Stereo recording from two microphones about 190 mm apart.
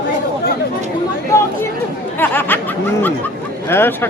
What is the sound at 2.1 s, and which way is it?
Snicker, 10° left (ahead or behind).